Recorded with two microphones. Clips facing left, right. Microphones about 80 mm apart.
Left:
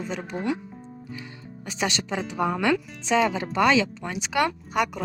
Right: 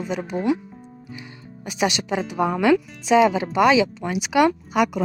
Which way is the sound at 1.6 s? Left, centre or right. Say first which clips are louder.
Right 5 dB; centre.